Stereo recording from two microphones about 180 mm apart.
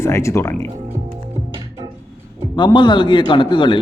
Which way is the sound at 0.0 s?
15° left (ahead or behind).